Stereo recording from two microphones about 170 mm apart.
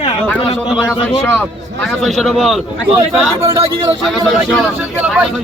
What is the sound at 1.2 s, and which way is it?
Speech, 10° left (ahead or behind).